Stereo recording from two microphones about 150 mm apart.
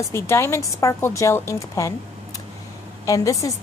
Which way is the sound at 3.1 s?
20° left (ahead or behind).